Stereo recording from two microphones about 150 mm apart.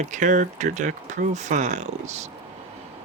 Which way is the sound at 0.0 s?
55° right (ahead or behind).